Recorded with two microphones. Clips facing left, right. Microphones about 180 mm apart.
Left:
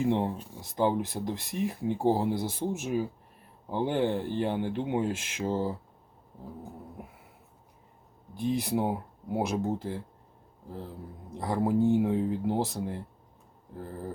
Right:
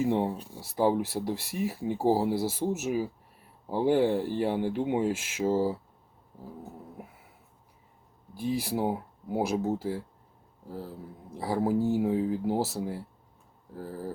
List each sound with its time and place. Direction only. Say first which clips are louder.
0.0 s speech: right 1 dB; 5° right (ahead or behind)
0.5 s speech: right 1 dB; 35° right (ahead or behind)
1.0 s speech: right 2 dB; 5° right (ahead or behind)
8.4 s speech: left 1 dB; 5° right (ahead or behind)
11.3 s speech: even; 5° right (ahead or behind)